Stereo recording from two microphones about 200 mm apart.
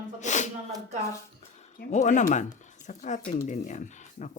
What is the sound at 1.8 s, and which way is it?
Speech, 35° left (ahead or behind).